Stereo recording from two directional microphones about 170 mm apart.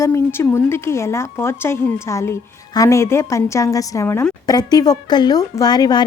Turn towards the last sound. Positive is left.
turn(degrees=25)  # may be behind; listen again after turning